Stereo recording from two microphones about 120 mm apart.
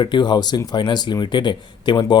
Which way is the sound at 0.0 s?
40° left (ahead or behind).